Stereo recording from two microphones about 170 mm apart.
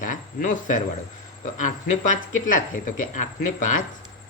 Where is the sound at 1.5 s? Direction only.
50° left (ahead or behind).